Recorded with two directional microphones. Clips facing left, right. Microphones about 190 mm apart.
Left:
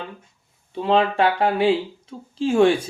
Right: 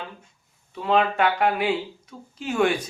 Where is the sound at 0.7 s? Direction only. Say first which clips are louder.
Left 3 dB; 30° left (ahead or behind).